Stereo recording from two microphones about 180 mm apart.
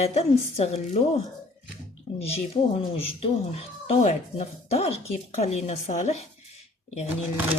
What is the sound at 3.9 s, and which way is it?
Speech, 35° left (ahead or behind).